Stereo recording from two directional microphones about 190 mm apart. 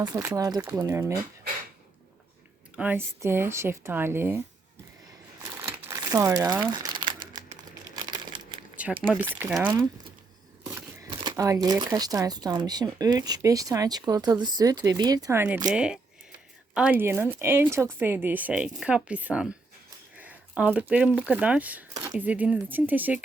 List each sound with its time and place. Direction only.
0.0 s speech: 20° right (ahead or behind)
2.7 s speech: 10° right (ahead or behind)
5.6 s crumpling: 15° right (ahead or behind)
8.8 s a sound: 5° right (ahead or behind)
9.3 s speech: 5° right (ahead or behind)
10.8 s speech: 20° right (ahead or behind)
20.1 s a sound: 10° right (ahead or behind)
21.2 s speech: 5° right (ahead or behind)